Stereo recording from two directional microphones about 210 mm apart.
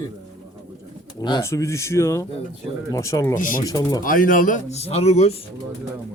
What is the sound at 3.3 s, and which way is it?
Speech, 40° left (ahead or behind).